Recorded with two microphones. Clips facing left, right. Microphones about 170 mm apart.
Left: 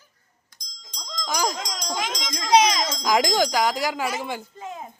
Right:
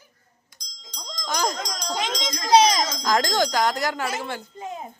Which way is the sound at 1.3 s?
5° left (ahead or behind).